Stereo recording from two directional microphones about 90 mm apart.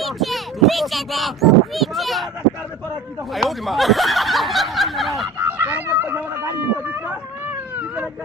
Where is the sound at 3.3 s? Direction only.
Centre (ahead or behind).